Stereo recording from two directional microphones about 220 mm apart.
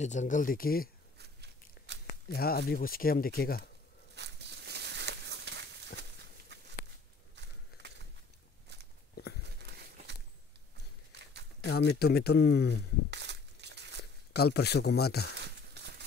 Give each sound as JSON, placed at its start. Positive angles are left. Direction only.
{"t": 0.0, "sound": "speech", "side_deg": 35}
{"t": 1.1, "sound": "biting", "side_deg": -50}
{"t": 1.9, "sound": "tearing", "side_deg": -50}
{"t": 2.3, "sound": "speech", "side_deg": 45}
{"t": 4.1, "sound": "a sound", "side_deg": -50}
{"t": 7.7, "sound": "walk", "side_deg": 45}
{"t": 9.6, "sound": "crumpling", "side_deg": -50}
{"t": 11.6, "sound": "speech", "side_deg": 50}
{"t": 13.1, "sound": "crushing", "side_deg": -50}
{"t": 14.3, "sound": "speech", "side_deg": 45}
{"t": 15.3, "sound": "a sound", "side_deg": -50}